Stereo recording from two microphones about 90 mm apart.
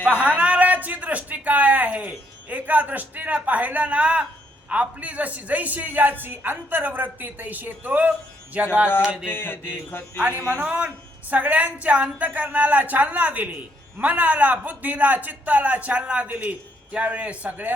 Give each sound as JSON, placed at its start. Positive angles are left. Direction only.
{"t": 0.0, "sound": "a man's voice", "side_deg": -15}
{"t": 9.3, "sound": "mantra", "side_deg": 25}
{"t": 10.5, "sound": "a man's voice", "side_deg": -20}